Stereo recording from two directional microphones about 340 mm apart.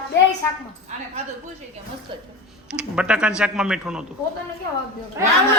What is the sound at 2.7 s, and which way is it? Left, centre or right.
A man's voice, centre.